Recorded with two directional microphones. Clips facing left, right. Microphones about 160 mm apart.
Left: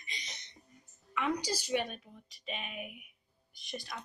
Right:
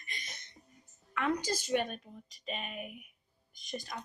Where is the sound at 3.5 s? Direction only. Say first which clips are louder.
Right 2 dB; 45° right (ahead or behind).